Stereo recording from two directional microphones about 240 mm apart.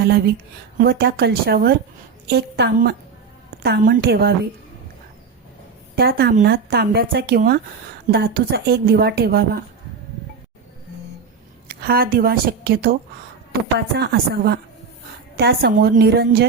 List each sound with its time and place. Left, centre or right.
0.8 s a woman's voice: right
6.0 s speech: right
11.7 s a woman's voice: right